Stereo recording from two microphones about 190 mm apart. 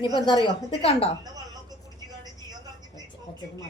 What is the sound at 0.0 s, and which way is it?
A woman's voice, 25° left (ahead or behind).